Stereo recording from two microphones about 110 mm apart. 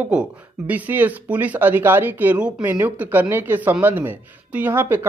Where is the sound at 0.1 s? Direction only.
10° right (ahead or behind).